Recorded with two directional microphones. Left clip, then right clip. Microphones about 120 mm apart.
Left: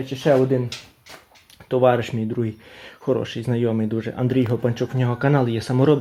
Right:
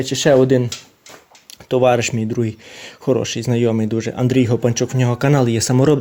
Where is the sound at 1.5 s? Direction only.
20° right (ahead or behind).